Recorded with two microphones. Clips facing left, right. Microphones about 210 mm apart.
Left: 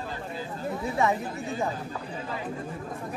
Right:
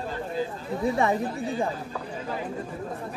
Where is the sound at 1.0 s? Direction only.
30° right (ahead or behind).